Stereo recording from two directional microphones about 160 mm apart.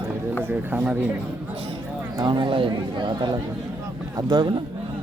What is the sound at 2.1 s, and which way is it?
Speech, 25° right (ahead or behind).